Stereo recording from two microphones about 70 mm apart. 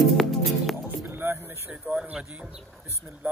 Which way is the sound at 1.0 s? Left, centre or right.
Right.